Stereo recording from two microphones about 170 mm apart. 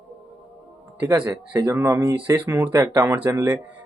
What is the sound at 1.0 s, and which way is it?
Speech, 10° right (ahead or behind).